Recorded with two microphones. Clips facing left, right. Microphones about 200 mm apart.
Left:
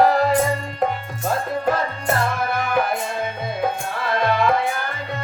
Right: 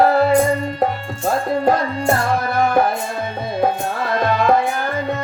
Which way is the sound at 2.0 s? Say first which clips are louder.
Right 5 dB; 30° right (ahead or behind).